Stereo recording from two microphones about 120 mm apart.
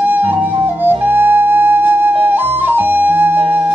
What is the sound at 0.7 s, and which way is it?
Flute, 15° right (ahead or behind).